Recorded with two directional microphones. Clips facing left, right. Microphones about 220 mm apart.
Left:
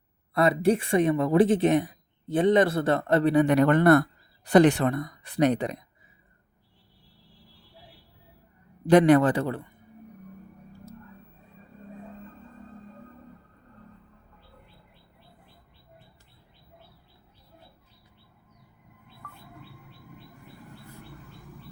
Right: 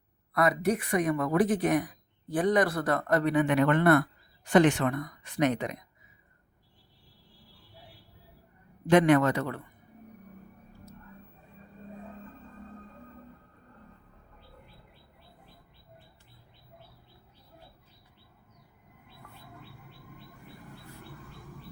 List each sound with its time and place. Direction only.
0.3 s speech: 30° left (ahead or behind)
8.9 s speech: 35° left (ahead or behind)